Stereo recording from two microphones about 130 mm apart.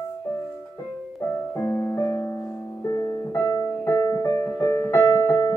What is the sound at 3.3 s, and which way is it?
Music, 20° left (ahead or behind).